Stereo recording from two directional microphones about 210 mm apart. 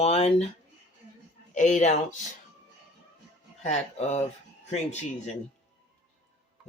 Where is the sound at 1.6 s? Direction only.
35° left (ahead or behind).